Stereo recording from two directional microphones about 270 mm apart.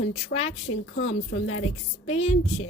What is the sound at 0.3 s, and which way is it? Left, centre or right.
Speech, left.